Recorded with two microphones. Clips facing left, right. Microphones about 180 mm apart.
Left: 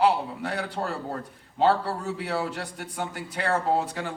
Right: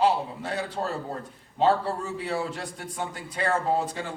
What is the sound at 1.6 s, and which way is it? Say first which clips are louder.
Speech: even; 70° left (ahead or behind).